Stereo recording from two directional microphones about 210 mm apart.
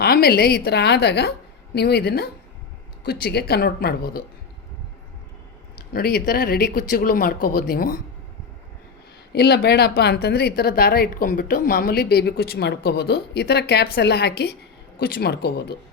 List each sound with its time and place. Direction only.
0.0 s a woman's voice: 45° left (ahead or behind)
5.9 s a woman's voice: 45° left (ahead or behind)
9.3 s a woman's voice: 50° left (ahead or behind)